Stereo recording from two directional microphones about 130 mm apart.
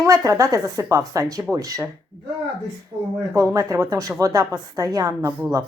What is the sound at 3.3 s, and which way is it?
Speech, 25° right (ahead or behind).